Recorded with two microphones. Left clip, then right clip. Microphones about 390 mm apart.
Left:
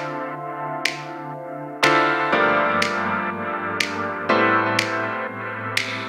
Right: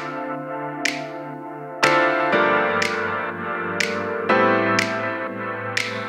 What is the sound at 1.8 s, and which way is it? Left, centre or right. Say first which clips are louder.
Music: even; centre.